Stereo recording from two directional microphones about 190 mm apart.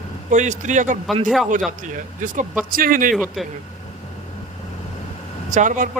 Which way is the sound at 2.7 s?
45° right (ahead or behind).